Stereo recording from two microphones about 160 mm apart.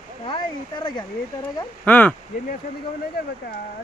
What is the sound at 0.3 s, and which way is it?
Speech, 30° left (ahead or behind).